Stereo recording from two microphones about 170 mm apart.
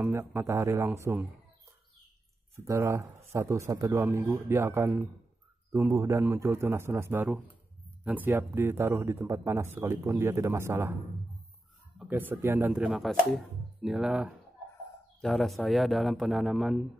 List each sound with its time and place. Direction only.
0.0 s speech: 15° right (ahead or behind)
2.5 s speech: 15° right (ahead or behind)
12.0 s a man's voice: 10° right (ahead or behind)